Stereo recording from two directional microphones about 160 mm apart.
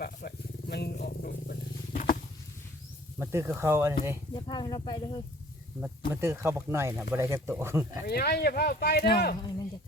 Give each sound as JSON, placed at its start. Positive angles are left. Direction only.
{"t": 0.0, "sound": "roaring cats", "side_deg": 85}
{"t": 3.2, "sound": "speech", "side_deg": -15}
{"t": 4.4, "sound": "speech", "side_deg": 25}
{"t": 6.1, "sound": "speech", "side_deg": -15}
{"t": 8.0, "sound": "speech", "side_deg": 80}
{"t": 9.4, "sound": "speech", "side_deg": 25}